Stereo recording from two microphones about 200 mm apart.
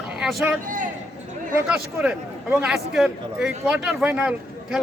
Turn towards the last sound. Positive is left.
turn(degrees=-5)  # may be behind; listen again after turning